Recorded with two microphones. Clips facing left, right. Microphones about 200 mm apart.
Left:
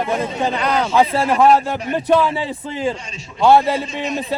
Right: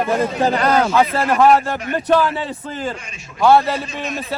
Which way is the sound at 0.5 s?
45° right (ahead or behind).